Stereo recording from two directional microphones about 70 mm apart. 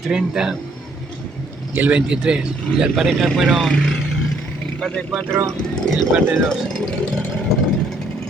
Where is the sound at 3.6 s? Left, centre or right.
Centre.